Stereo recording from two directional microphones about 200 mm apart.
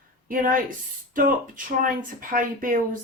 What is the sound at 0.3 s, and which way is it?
Speech, 45° right (ahead or behind).